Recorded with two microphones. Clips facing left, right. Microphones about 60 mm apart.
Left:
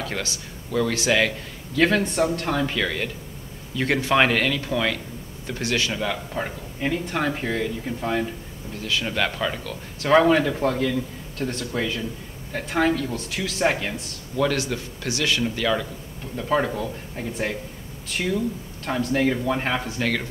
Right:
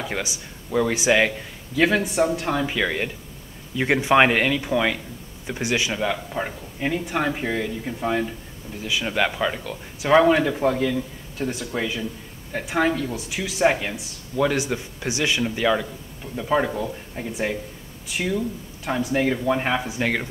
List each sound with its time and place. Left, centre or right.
0.0 s speech: centre
1.8 s speech: centre